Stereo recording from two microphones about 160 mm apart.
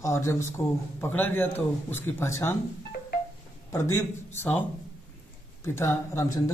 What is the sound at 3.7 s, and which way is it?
Speech, 20° left (ahead or behind).